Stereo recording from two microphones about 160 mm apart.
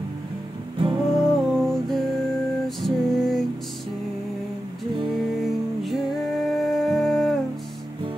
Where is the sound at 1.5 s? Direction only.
Centre (ahead or behind).